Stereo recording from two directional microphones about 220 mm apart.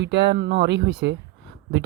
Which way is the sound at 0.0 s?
50° right (ahead or behind).